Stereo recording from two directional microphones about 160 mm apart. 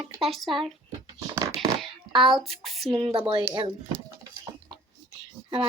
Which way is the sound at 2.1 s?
Centre (ahead or behind).